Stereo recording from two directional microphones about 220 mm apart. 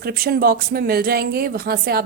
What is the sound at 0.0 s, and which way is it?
Speech, 45° right (ahead or behind).